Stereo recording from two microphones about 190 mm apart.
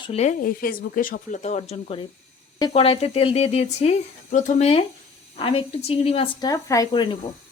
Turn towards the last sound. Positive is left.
turn(degrees=25)  # may be behind; listen again after turning